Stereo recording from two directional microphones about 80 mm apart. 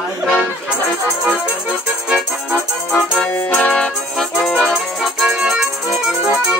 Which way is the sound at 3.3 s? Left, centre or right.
Left.